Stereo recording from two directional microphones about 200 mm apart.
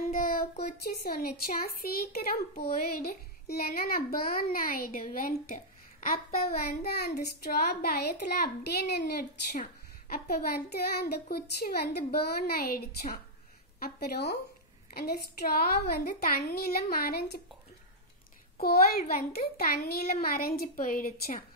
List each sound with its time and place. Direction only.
0.1 s a child's voice: 45° left (ahead or behind)
18.6 s a child's voice: 50° left (ahead or behind)